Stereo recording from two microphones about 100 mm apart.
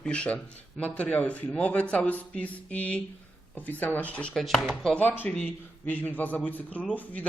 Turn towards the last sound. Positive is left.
turn(degrees=15)  # may be behind; listen again after turning